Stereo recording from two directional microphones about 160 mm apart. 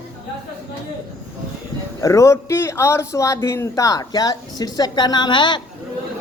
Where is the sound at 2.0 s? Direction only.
20° left (ahead or behind).